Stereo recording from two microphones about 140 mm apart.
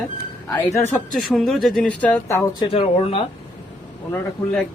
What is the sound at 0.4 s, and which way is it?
Speech, 15° left (ahead or behind).